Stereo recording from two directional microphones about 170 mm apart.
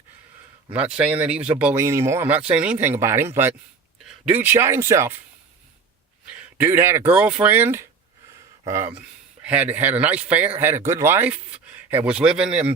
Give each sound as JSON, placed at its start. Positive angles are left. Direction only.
{"t": 0.7, "sound": "speech", "side_deg": -5}
{"t": 6.6, "sound": "speech", "side_deg": -15}